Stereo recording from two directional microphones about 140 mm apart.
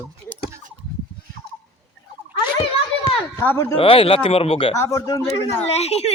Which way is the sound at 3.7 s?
40° left (ahead or behind).